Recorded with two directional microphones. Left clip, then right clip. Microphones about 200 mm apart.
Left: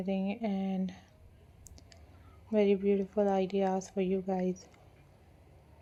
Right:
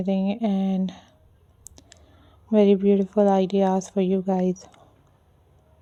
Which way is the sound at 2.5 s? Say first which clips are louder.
Right 9 dB; 55° right (ahead or behind).